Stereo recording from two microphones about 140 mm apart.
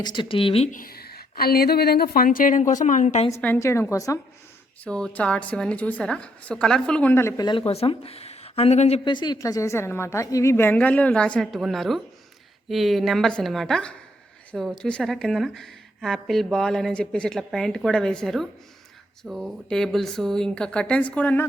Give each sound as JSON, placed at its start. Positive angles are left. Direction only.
{"t": 0.0, "sound": "speech", "side_deg": 35}
{"t": 0.7, "sound": "a woman's voice", "side_deg": 90}
{"t": 3.4, "sound": "a woman's voice", "side_deg": 15}
{"t": 4.8, "sound": "a woman's voice", "side_deg": 5}
{"t": 7.4, "sound": "speech", "side_deg": 40}
{"t": 9.0, "sound": "a woman's voice", "side_deg": 35}